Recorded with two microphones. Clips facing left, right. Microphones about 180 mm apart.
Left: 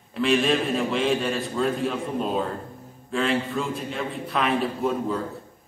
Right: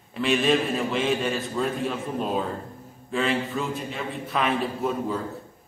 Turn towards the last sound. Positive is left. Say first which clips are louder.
# left 2 dB
turn(degrees=0)  # may be behind; listen again after turning